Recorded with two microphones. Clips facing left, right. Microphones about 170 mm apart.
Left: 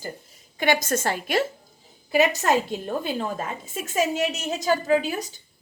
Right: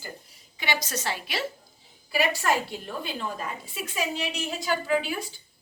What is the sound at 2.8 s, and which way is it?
A woman's voice, 45° left (ahead or behind).